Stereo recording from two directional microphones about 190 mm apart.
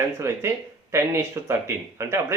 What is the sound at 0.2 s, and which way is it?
Speech, 15° right (ahead or behind).